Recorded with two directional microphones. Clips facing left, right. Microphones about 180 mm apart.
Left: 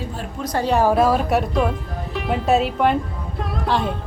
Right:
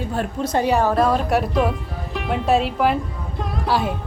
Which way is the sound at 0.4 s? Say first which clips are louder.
Right 1 dB; 20° right (ahead or behind).